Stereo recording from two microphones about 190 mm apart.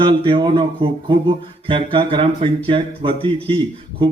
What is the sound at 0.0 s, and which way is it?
A man's voice, 25° right (ahead or behind).